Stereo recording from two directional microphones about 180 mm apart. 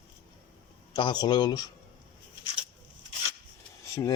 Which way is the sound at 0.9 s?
25° left (ahead or behind).